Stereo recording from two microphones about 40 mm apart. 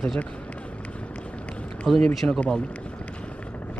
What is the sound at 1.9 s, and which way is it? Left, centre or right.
Speech, centre.